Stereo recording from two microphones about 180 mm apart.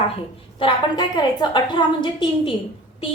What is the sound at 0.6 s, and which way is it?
A woman's voice, 25° left (ahead or behind).